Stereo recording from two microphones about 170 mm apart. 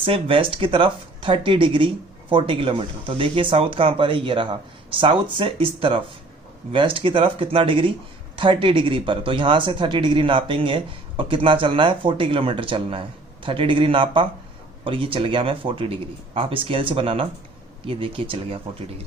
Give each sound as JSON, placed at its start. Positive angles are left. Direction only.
{"t": 0.0, "sound": "speech", "side_deg": -30}